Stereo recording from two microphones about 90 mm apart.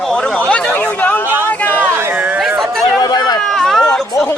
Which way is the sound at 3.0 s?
50° left (ahead or behind).